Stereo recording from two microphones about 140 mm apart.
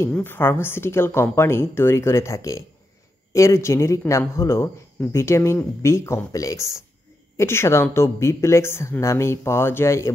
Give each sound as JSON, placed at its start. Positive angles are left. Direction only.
{"t": 0.1, "sound": "speech", "side_deg": 15}